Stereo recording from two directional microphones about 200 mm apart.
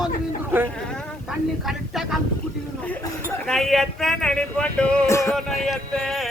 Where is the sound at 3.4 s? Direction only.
Centre (ahead or behind).